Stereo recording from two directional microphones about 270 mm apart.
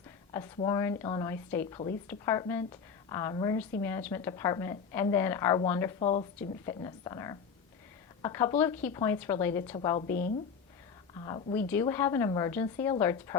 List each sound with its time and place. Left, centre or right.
0.3 s a woman's voice: centre
6.0 s a woman's voice: left
10.1 s speech: left
11.1 s a woman's voice: centre